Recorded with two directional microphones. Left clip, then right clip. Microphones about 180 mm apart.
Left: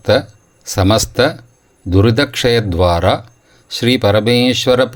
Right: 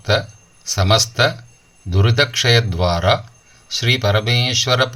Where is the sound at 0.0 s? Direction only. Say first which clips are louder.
Left 5 dB; 45° left (ahead or behind).